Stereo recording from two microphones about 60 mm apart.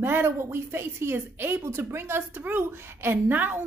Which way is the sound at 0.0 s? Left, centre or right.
Right.